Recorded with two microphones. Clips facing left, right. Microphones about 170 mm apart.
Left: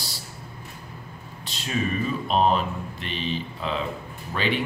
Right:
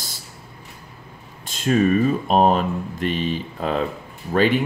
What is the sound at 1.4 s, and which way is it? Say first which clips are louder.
Speech: right 10 dB; 50° right (ahead or behind).